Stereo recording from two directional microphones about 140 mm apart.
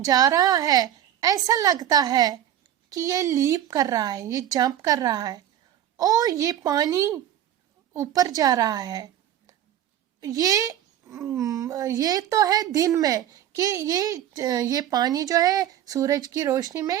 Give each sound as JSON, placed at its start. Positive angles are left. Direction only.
{"t": 0.0, "sound": "speech", "side_deg": -25}
{"t": 10.2, "sound": "speech", "side_deg": -25}